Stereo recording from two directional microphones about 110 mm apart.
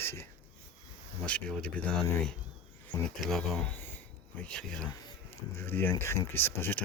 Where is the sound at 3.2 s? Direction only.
5° left (ahead or behind).